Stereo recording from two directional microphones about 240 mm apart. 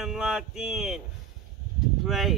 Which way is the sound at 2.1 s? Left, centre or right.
Centre.